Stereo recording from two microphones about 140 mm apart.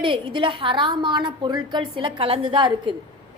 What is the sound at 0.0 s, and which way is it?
A woman's voice, 40° right (ahead or behind).